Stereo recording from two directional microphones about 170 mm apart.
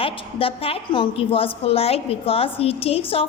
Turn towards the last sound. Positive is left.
turn(degrees=35)  # may be behind; listen again after turning